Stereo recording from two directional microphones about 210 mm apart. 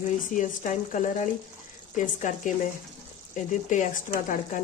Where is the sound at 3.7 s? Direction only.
35° left (ahead or behind).